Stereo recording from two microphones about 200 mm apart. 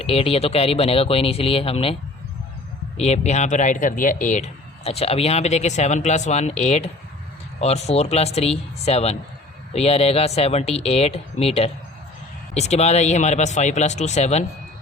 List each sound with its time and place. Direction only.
0.0 s speech: 30° left (ahead or behind)
3.0 s speech: 35° left (ahead or behind)